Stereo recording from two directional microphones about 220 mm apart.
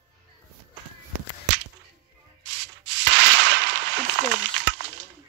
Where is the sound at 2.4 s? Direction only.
55° right (ahead or behind).